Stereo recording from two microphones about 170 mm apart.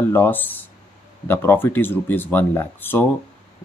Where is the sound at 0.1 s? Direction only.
10° left (ahead or behind).